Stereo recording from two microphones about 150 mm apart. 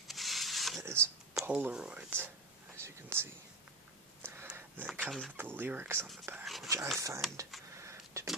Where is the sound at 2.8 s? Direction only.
15° right (ahead or behind).